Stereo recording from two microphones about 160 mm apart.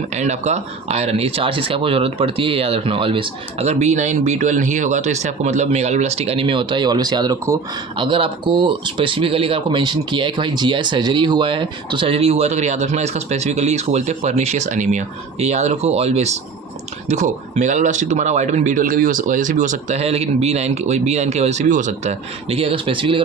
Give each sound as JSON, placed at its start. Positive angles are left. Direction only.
{"t": 0.1, "sound": "speech", "side_deg": -45}
{"t": 22.4, "sound": "speech", "side_deg": -35}